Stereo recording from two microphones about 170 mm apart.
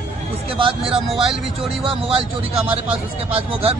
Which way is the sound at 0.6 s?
30° right (ahead or behind).